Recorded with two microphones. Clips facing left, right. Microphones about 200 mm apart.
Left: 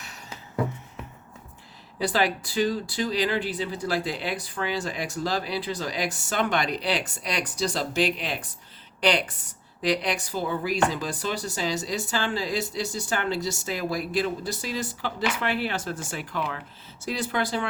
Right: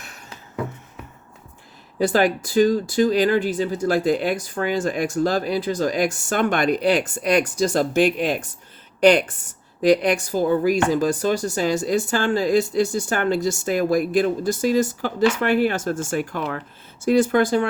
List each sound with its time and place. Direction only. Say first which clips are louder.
2.0 s a woman's voice: right 6 dB; 50° right (ahead or behind)